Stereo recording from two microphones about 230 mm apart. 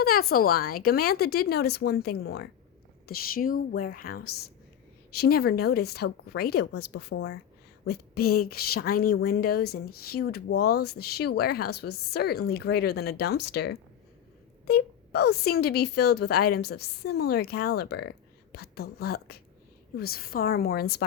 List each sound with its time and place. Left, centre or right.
0.0 s a woman's voice: left